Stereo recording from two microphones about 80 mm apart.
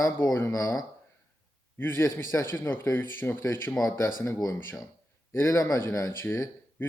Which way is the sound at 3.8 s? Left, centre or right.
Left.